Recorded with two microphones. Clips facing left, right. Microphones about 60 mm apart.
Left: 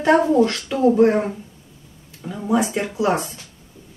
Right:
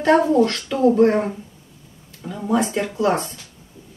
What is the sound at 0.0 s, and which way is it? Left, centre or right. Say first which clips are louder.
Speech: even; centre.